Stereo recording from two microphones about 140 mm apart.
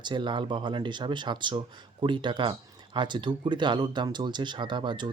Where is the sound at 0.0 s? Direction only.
35° right (ahead or behind).